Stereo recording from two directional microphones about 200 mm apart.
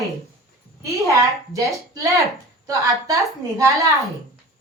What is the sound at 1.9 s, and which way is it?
A woman's voice, 15° right (ahead or behind).